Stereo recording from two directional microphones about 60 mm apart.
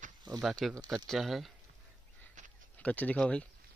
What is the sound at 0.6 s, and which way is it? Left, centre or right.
Speech, centre.